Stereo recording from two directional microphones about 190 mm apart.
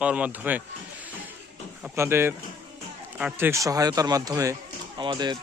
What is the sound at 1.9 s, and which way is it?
A man's voice, 10° right (ahead or behind).